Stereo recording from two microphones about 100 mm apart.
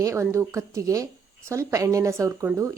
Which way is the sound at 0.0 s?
30° right (ahead or behind).